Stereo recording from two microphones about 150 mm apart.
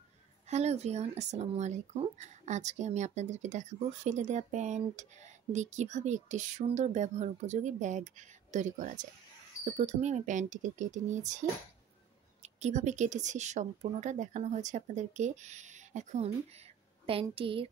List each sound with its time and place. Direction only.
0.5 s speech: 45° right (ahead or behind)
12.5 s speech: 50° right (ahead or behind)
17.0 s speech: 40° right (ahead or behind)